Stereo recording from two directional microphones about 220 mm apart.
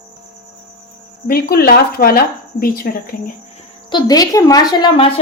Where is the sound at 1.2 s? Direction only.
45° left (ahead or behind).